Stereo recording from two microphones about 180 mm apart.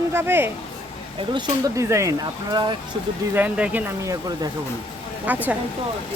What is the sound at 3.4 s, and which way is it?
Speech, 5° right (ahead or behind).